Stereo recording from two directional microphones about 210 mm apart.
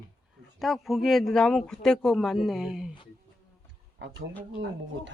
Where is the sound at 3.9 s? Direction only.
55° right (ahead or behind).